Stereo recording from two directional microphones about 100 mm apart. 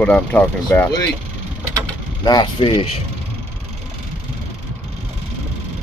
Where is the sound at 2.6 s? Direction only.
60° left (ahead or behind).